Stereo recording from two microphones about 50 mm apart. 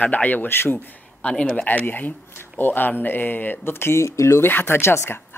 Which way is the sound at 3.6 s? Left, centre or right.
Left.